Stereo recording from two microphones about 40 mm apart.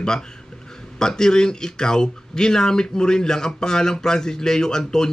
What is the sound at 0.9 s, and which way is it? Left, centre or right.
Speech, centre.